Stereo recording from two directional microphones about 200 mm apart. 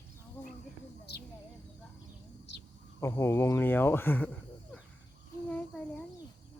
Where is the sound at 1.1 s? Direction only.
55° left (ahead or behind).